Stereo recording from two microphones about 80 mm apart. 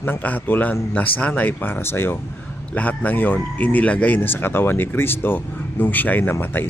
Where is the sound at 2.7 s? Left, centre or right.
Centre.